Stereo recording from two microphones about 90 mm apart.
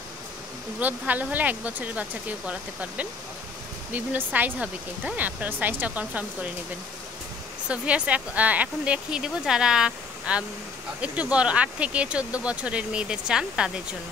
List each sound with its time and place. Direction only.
0.7 s speech: 20° right (ahead or behind)
7.6 s speech: 15° right (ahead or behind)